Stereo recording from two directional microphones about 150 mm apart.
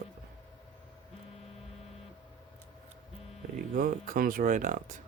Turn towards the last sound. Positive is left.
turn(degrees=-60)  # may be behind; listen again after turning